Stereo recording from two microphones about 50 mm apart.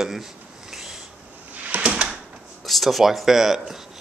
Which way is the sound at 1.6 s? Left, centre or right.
Right.